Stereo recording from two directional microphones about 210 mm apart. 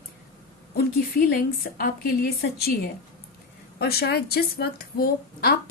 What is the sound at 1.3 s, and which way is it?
A woman's voice, 45° left (ahead or behind).